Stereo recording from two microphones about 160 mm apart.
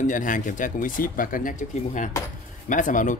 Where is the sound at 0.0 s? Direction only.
55° left (ahead or behind).